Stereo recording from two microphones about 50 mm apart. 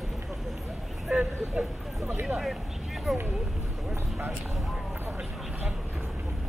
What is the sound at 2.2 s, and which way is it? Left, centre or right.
Speech, centre.